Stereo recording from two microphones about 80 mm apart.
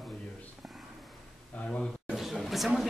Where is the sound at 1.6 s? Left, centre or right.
Centre.